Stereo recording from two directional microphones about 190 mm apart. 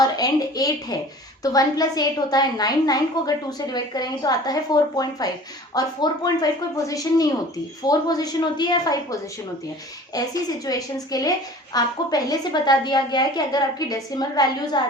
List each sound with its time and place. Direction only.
0.0 s a woman's voice: 20° left (ahead or behind)
10.1 s a woman's voice: 20° left (ahead or behind)